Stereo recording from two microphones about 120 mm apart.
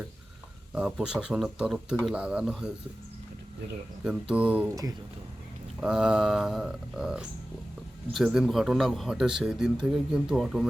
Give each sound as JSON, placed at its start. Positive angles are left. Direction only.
{"t": 0.7, "sound": "speech", "side_deg": -5}
{"t": 4.0, "sound": "speech", "side_deg": -5}
{"t": 4.7, "sound": "speech", "side_deg": -30}
{"t": 5.8, "sound": "speech", "side_deg": -5}